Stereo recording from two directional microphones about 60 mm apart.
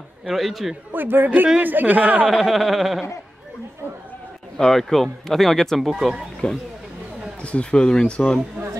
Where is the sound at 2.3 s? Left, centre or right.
Centre.